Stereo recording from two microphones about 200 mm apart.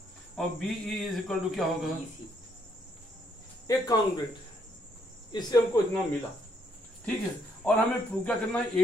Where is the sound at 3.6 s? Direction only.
20° left (ahead or behind).